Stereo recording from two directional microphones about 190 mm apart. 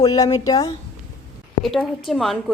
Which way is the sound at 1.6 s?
Centre (ahead or behind).